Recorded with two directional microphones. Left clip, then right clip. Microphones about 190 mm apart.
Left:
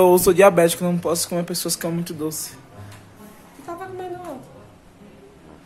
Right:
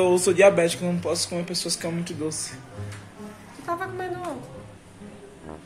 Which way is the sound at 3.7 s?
Centre (ahead or behind).